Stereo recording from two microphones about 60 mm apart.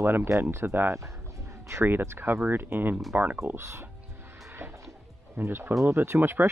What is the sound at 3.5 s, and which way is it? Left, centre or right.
Speech, right.